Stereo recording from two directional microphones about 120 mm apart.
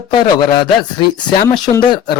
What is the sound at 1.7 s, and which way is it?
Speech, 65° left (ahead or behind).